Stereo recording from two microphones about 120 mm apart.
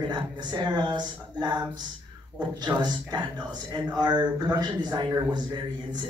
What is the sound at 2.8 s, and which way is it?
Speech, 35° right (ahead or behind).